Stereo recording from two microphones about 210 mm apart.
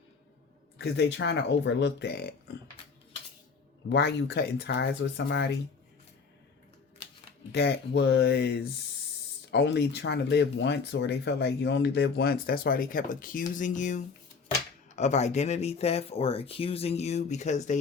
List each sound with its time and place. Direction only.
0.8 s speech: 55° left (ahead or behind)
3.9 s speech: 50° left (ahead or behind)
7.5 s speech: 55° left (ahead or behind); by 17.7 s 35° left (ahead or behind)